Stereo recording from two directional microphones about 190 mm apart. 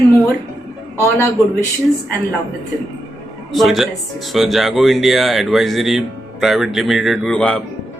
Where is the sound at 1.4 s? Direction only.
15° left (ahead or behind).